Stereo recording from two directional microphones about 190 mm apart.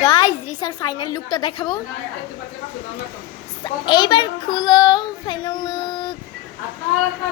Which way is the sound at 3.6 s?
25° left (ahead or behind).